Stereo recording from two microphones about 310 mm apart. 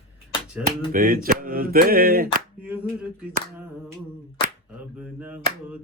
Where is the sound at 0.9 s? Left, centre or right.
Right.